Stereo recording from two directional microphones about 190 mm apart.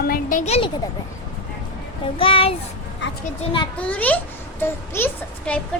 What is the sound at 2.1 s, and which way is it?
Speech, 30° left (ahead or behind).